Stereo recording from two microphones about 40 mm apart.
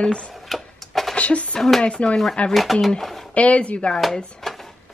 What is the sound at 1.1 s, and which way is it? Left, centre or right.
Speech, left.